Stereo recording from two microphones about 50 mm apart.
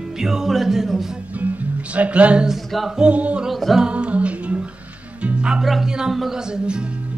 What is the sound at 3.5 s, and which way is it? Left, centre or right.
Music, centre.